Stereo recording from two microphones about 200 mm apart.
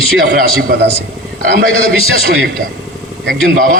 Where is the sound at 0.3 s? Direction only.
50° right (ahead or behind).